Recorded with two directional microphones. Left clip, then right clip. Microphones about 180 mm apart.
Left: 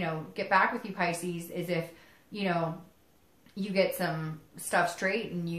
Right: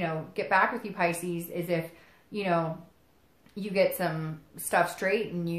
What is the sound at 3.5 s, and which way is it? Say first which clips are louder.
Speech: right 2 dB; 35° right (ahead or behind).